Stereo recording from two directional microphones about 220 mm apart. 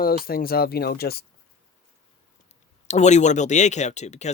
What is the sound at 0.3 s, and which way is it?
Speech, 45° left (ahead or behind).